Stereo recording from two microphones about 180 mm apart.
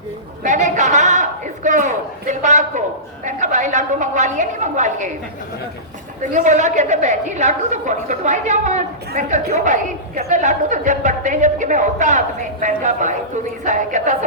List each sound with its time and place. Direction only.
0.4 s a sound: 45° right (ahead or behind)
3.2 s a woman's voice: 45° right (ahead or behind)
6.3 s a woman's voice: 40° right (ahead or behind)